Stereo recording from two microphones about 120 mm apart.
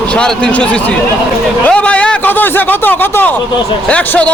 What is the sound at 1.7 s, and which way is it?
A man's voice, 10° left (ahead or behind).